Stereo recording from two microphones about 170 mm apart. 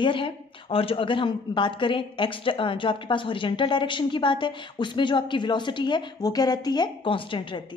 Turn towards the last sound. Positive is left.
turn(degrees=30)  # may be behind; listen again after turning